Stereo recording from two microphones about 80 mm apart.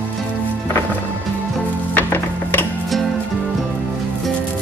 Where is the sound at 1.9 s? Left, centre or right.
Left.